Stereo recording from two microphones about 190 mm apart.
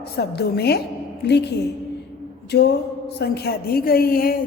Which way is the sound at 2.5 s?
60° left (ahead or behind).